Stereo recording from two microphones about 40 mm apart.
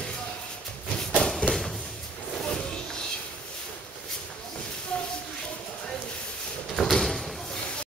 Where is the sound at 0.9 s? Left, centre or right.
Centre.